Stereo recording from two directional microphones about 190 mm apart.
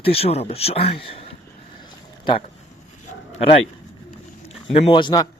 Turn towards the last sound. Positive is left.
turn(degrees=20)  # may be behind; listen again after turning